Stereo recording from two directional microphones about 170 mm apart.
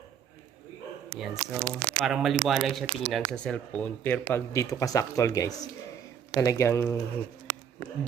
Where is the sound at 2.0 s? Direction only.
Centre (ahead or behind); by 7.0 s 15° left (ahead or behind).